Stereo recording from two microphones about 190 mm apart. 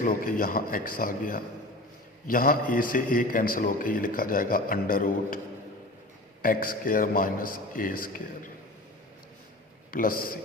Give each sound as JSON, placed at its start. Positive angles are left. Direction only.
{"t": 0.0, "sound": "a man's voice", "side_deg": 45}
{"t": 6.4, "sound": "a man's voice", "side_deg": 50}
{"t": 9.9, "sound": "a man's voice", "side_deg": 50}